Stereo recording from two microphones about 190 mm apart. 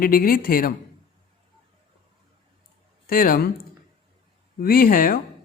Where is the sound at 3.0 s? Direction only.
50° left (ahead or behind).